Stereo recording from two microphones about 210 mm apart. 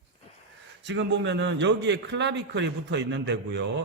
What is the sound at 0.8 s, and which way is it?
A man's voice, 55° right (ahead or behind).